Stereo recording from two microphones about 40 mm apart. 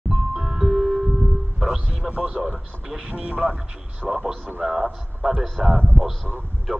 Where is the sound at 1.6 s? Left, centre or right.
Centre.